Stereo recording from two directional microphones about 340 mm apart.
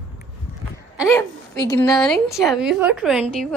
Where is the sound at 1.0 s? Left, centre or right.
Centre.